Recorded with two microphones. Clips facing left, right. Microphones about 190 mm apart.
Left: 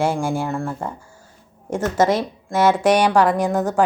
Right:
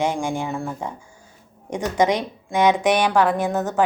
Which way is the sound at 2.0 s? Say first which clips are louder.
Left 1 dB; 5° left (ahead or behind).